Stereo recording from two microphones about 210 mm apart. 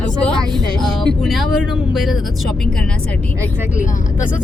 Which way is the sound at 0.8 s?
Centre (ahead or behind).